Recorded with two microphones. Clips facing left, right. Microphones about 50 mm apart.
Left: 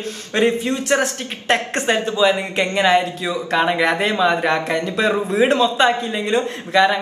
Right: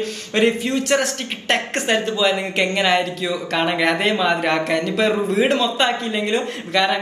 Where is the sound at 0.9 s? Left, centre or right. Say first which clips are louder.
Left 1 dB; left.